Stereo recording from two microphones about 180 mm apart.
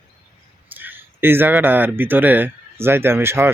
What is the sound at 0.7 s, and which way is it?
Speech, 10° right (ahead or behind).